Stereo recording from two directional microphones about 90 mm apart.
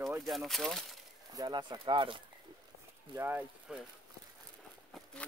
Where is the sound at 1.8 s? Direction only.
65° right (ahead or behind).